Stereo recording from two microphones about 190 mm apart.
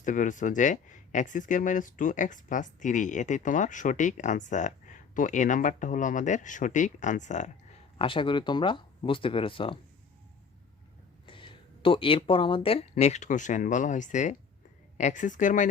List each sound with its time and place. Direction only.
0.0 s speech: 40° left (ahead or behind)
11.3 s speech: 25° left (ahead or behind); by 15.6 s 40° left (ahead or behind)